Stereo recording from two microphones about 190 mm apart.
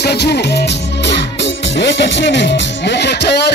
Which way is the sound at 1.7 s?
70° left (ahead or behind).